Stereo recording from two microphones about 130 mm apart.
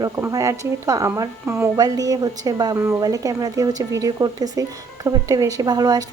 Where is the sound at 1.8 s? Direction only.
30° right (ahead or behind).